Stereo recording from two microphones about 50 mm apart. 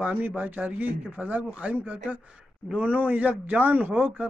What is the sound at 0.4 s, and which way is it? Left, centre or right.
A man's voice, right.